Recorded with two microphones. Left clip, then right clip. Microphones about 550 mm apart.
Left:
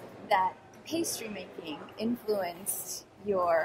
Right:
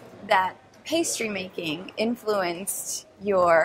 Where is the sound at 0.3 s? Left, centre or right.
Right.